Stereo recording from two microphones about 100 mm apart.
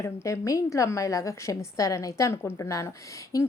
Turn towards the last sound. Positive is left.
turn(degrees=35)  # may be behind; listen again after turning